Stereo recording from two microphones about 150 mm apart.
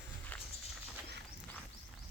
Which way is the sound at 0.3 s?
10° left (ahead or behind).